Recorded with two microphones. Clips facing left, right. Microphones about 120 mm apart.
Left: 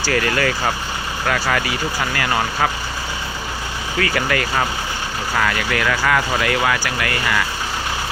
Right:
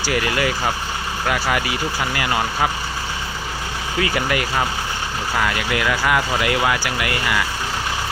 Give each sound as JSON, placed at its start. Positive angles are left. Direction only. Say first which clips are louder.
{"t": 0.0, "sound": "speech", "louder": "left 1 dB", "side_deg": -15}
{"t": 4.0, "sound": "speech", "louder": "left 1 dB", "side_deg": -20}